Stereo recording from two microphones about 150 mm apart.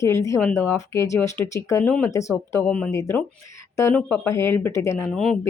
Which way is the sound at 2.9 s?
20° left (ahead or behind).